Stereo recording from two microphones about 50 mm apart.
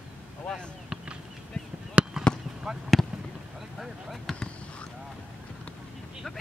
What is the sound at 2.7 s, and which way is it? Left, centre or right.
Fireworks, centre.